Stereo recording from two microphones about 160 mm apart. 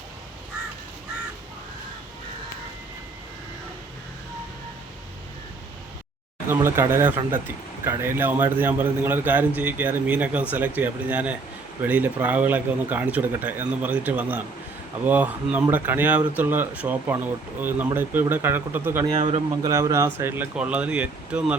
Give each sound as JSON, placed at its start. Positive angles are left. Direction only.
{"t": 6.5, "sound": "speech", "side_deg": -15}
{"t": 19.1, "sound": "speech", "side_deg": -40}
{"t": 19.6, "sound": "speech", "side_deg": -20}